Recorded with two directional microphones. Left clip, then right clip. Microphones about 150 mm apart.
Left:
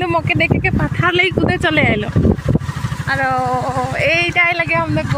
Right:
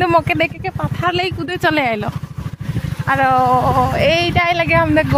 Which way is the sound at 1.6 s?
30° right (ahead or behind).